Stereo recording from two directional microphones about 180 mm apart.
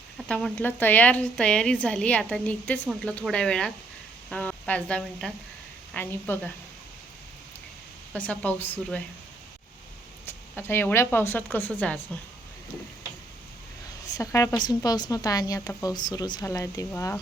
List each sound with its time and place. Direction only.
0.2 s a woman's voice: 5° left (ahead or behind)
8.1 s speech: 5° left (ahead or behind)
10.2 s speech: 10° left (ahead or behind)
14.1 s a woman's voice: 20° left (ahead or behind)